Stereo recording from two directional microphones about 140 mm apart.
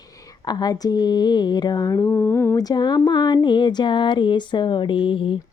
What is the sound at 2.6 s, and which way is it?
Mantra, 30° left (ahead or behind).